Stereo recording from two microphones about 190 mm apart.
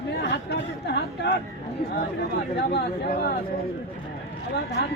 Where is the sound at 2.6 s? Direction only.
60° left (ahead or behind).